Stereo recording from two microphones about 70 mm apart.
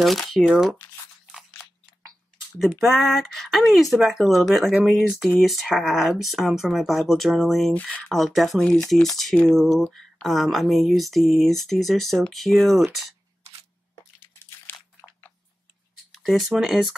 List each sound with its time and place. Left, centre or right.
0.0 s speech: centre
0.4 s speech: centre
2.8 s speech: centre
8.5 s speech: centre
14.7 s biting: left
16.1 s speech: centre